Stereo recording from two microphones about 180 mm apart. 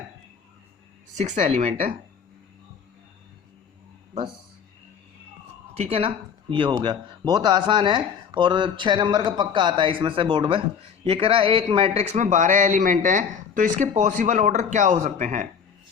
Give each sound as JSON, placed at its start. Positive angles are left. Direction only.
{"t": 1.1, "sound": "speech", "side_deg": -40}
{"t": 5.7, "sound": "speech", "side_deg": -35}